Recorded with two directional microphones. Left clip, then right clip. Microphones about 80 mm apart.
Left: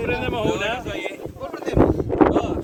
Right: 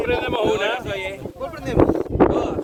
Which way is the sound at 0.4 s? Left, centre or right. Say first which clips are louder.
Right 3 dB; right.